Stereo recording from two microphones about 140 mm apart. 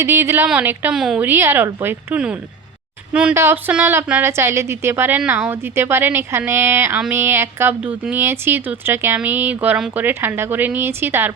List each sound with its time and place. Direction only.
0.0 s speech: 20° right (ahead or behind)